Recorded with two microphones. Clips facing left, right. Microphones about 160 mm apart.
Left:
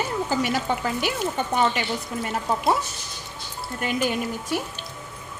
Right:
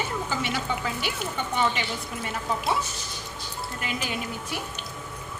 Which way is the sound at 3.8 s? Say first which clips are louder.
Left 9 dB; 50° left (ahead or behind).